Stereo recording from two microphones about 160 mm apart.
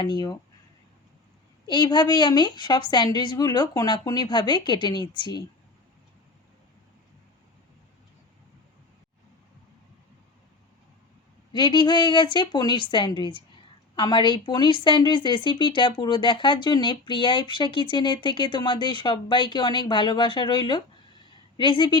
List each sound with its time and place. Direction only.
0.0 s speech: 25° left (ahead or behind)
1.6 s speech: 25° left (ahead or behind)
11.5 s speech: 30° left (ahead or behind)